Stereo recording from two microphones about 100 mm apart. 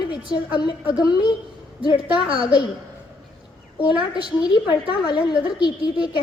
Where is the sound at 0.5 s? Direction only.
50° left (ahead or behind).